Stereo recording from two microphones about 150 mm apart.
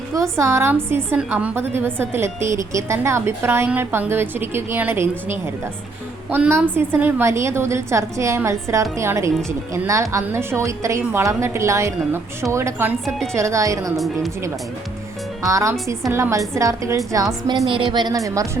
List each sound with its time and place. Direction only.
0.1 s a woman's voice: 20° right (ahead or behind)
15.4 s a woman's voice: 20° right (ahead or behind)